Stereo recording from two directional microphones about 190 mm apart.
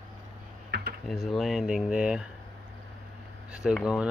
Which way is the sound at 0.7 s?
60° right (ahead or behind).